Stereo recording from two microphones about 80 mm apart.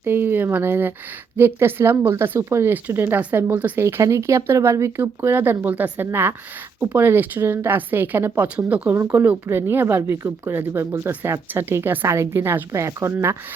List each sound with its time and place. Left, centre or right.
0.0 s speech: right
8.9 s speech: right